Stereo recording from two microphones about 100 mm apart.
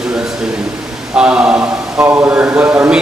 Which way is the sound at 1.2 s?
10° right (ahead or behind).